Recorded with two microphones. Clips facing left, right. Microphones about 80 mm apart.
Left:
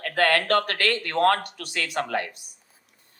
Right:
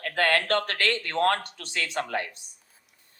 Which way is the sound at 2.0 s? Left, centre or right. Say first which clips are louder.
Left 3 dB; left.